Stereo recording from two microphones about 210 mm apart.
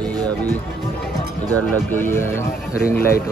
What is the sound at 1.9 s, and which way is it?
Speech, 10° left (ahead or behind).